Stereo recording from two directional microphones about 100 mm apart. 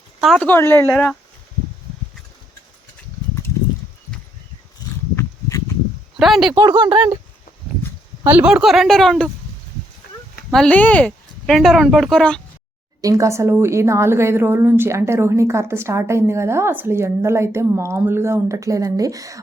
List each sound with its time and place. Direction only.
0.3 s speech: 20° left (ahead or behind)
5.1 s a sound: 30° left (ahead or behind)
6.1 s speech: centre (ahead or behind)
6.5 s speech: 50° right (ahead or behind)
8.3 s speech: 15° right (ahead or behind)
8.6 s speech: centre (ahead or behind)
10.7 s speech: 15° left (ahead or behind)
11.4 s speech: centre (ahead or behind)
13.0 s a woman's voice: 35° right (ahead or behind)